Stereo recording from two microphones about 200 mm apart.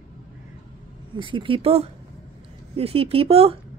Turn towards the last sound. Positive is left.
turn(degrees=-30)  # may be behind; listen again after turning